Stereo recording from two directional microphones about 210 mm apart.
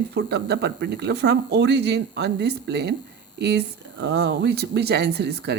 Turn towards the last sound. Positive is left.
turn(degrees=-50)  # may be behind; listen again after turning